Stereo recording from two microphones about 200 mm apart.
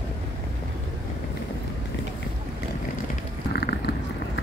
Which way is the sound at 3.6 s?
55° left (ahead or behind).